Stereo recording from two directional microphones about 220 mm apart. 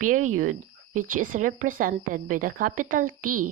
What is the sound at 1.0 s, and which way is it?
Speech, 35° right (ahead or behind).